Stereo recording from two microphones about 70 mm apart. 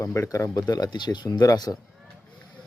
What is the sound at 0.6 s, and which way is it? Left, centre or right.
Speech, left.